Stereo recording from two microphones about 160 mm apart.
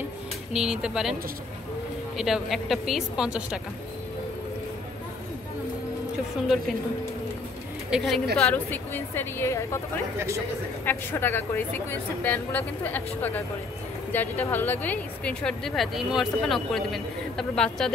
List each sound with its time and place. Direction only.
0.5 s speech: 5° right (ahead or behind)
2.1 s speech: centre (ahead or behind)
7.9 s speech: centre (ahead or behind)
10.1 s speech: 15° right (ahead or behind)
10.9 s speech: 15° left (ahead or behind)